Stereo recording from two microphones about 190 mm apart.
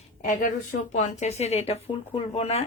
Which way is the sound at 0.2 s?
45° left (ahead or behind).